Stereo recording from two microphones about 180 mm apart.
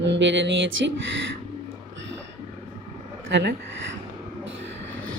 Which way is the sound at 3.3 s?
80° right.